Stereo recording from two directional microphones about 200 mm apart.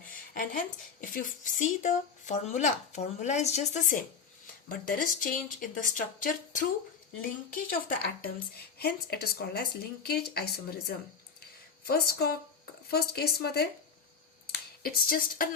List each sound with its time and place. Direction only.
0.1 s a woman's voice: 45° left (ahead or behind)